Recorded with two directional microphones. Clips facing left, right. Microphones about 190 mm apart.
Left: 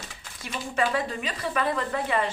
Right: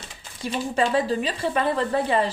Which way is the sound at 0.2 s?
30° right (ahead or behind).